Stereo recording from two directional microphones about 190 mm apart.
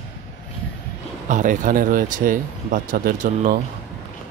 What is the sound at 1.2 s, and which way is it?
Speech, 40° right (ahead or behind).